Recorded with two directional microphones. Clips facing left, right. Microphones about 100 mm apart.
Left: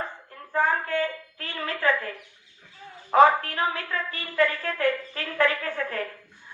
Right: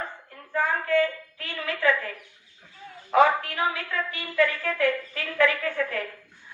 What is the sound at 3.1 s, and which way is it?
A man's voice, 35° left (ahead or behind).